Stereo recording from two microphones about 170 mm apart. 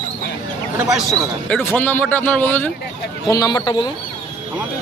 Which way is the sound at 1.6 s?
10° left (ahead or behind).